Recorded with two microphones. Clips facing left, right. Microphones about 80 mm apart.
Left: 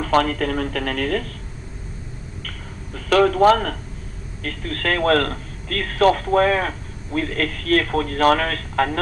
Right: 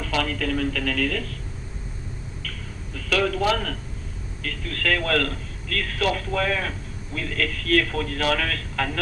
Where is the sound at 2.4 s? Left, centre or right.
Left.